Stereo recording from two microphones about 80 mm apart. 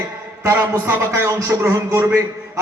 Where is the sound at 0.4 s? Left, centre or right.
Right.